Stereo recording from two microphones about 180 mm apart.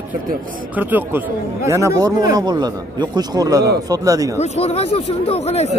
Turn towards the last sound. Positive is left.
turn(degrees=35)  # may be behind; listen again after turning